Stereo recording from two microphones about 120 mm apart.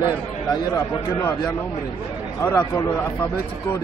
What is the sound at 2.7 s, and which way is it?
Speech, 20° left (ahead or behind).